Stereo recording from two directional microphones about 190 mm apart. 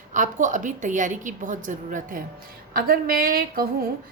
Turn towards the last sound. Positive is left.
turn(degrees=-50)  # may be behind; listen again after turning